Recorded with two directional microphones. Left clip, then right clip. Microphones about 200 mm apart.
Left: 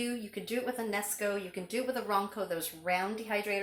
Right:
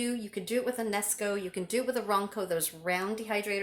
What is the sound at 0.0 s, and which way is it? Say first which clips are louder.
Speech: right 2 dB; 45° right (ahead or behind).